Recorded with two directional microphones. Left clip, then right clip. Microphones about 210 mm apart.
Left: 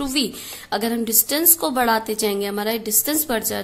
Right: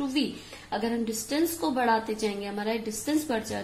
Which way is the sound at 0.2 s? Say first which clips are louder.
Left 6 dB; 40° left (ahead or behind).